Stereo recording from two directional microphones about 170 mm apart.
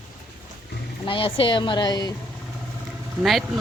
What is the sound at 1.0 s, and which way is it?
Speech, 30° left (ahead or behind).